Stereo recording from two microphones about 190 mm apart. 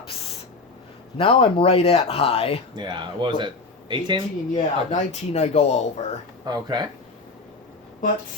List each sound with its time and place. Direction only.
1.1 s speech: 30° left (ahead or behind)
2.7 s speech: 25° right (ahead or behind)
4.5 s speech: 35° left (ahead or behind)
6.4 s speech: 20° right (ahead or behind)